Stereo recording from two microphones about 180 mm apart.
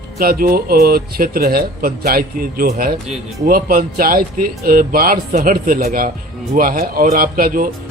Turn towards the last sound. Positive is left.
turn(degrees=-55)  # may be behind; listen again after turning